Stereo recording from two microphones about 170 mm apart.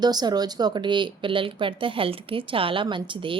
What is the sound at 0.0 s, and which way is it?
A woman's voice, 25° right (ahead or behind).